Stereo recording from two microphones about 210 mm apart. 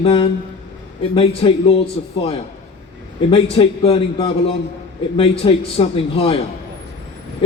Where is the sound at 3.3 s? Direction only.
25° left (ahead or behind).